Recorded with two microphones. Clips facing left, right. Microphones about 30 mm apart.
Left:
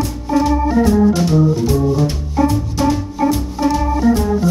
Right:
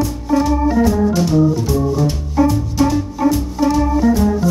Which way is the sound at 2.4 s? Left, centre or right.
Centre.